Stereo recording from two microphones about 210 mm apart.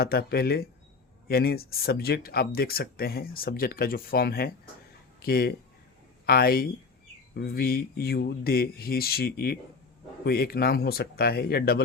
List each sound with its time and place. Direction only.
0.0 s speech: 45° left (ahead or behind)